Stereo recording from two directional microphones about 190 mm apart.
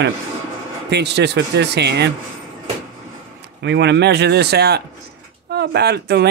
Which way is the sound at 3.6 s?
65° right (ahead or behind).